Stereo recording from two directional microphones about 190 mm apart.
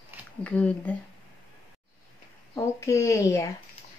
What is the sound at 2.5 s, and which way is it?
A child's voice, 15° left (ahead or behind).